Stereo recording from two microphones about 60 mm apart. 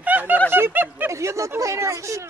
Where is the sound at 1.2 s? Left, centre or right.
Right.